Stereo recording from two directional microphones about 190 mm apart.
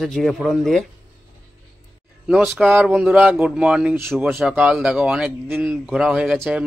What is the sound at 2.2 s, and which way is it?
Speech, centre (ahead or behind).